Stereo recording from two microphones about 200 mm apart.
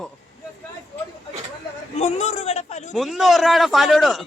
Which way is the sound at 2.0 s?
35° left (ahead or behind).